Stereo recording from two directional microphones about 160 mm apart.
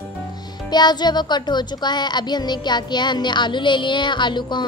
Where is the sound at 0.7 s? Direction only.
25° left (ahead or behind).